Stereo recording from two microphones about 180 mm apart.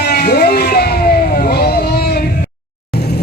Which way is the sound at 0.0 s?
60° left (ahead or behind).